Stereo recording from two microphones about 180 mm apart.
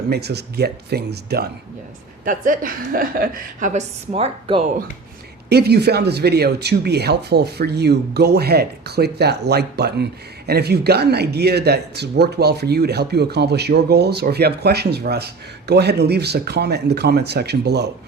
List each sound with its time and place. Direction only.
0.1 s speech: 65° right (ahead or behind)
2.2 s a woman's voice: 45° right (ahead or behind)
5.5 s speech: 65° right (ahead or behind)